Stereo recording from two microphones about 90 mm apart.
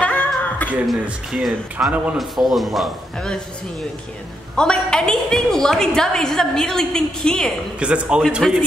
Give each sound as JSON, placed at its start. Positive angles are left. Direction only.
{"t": 0.0, "sound": "music", "side_deg": 15}
{"t": 1.0, "sound": "a man's voice", "side_deg": -5}
{"t": 4.6, "sound": "a woman's voice", "side_deg": 10}
{"t": 7.8, "sound": "a man's voice", "side_deg": -10}